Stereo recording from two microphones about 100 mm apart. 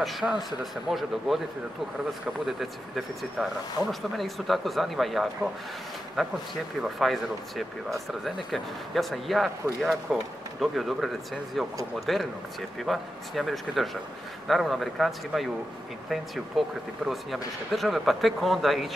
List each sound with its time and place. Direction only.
0.0 s speech: 5° right (ahead or behind)
3.4 s speech: 5° right (ahead or behind)
3.8 s speech: 25° right (ahead or behind)
4.2 s speech: centre (ahead or behind)
12.1 s speech: centre (ahead or behind)